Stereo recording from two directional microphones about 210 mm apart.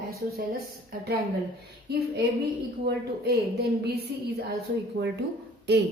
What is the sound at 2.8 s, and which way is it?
Speech, 50° right (ahead or behind).